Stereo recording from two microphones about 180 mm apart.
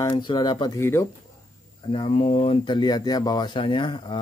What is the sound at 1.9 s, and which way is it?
Speech, 30° left (ahead or behind).